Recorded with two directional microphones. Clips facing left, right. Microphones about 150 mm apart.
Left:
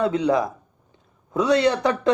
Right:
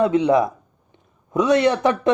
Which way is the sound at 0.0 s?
20° right (ahead or behind).